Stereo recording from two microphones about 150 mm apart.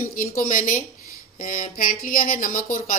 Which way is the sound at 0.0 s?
60° left (ahead or behind).